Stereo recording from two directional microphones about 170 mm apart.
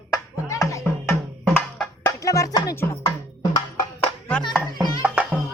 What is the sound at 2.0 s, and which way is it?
Music, 20° left (ahead or behind).